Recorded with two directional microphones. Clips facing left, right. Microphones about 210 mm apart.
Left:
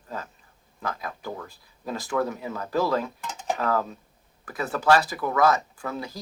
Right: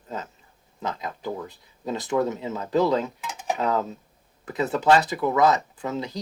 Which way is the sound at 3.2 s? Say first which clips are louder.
Right 1 dB; 10° right (ahead or behind).